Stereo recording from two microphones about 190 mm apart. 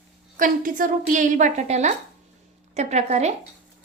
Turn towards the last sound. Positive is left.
turn(degrees=-35)  # may be behind; listen again after turning